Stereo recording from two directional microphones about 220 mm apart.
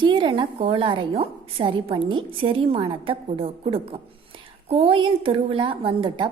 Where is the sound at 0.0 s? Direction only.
20° right (ahead or behind).